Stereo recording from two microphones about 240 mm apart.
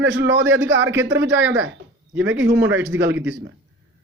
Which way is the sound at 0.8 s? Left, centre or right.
Centre.